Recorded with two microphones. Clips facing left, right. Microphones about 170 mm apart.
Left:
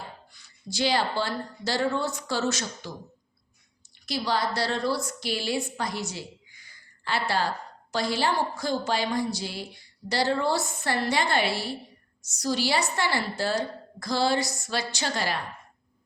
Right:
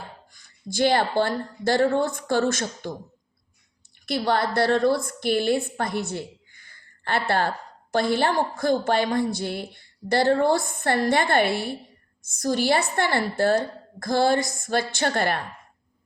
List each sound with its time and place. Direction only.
0.3 s a woman's voice: 50° right (ahead or behind)
4.0 s a woman's voice: 55° right (ahead or behind)